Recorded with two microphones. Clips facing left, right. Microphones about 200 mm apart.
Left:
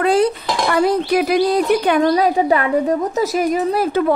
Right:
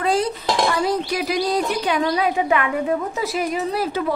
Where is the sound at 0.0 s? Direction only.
60° left (ahead or behind).